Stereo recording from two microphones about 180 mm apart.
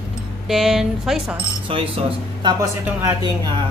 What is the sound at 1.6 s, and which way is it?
Speech, 30° right (ahead or behind).